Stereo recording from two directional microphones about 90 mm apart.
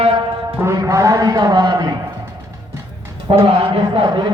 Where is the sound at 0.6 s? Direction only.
35° right (ahead or behind).